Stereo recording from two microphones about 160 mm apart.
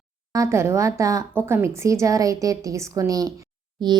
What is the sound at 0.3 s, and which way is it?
Speech, 15° right (ahead or behind).